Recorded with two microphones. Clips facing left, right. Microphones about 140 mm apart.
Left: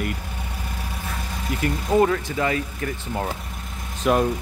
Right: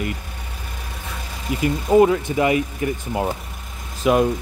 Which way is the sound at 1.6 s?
10° right (ahead or behind).